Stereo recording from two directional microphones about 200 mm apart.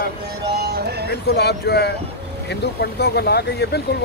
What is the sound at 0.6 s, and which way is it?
Music, 55° right (ahead or behind).